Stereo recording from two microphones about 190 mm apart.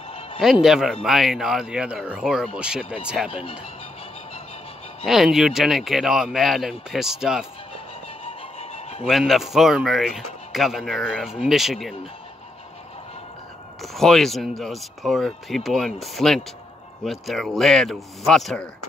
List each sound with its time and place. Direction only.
0.4 s speech: centre (ahead or behind)
5.0 s speech: centre (ahead or behind)
8.3 s music: 30° left (ahead or behind)
9.0 s speech: centre (ahead or behind)
13.9 s speech: centre (ahead or behind)